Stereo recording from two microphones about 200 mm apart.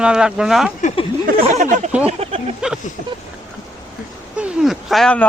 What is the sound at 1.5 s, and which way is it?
Speech, 35° right (ahead or behind).